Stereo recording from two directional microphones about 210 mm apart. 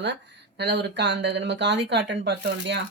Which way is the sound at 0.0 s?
55° right (ahead or behind).